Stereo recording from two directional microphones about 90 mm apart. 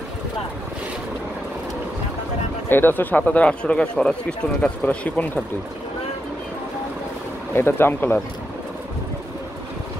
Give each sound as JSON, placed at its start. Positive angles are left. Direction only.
{"t": 2.7, "sound": "speech", "side_deg": 20}
{"t": 7.5, "sound": "speech", "side_deg": 25}